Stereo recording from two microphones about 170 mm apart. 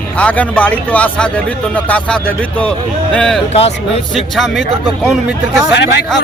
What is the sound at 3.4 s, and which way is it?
Speech, 35° left (ahead or behind).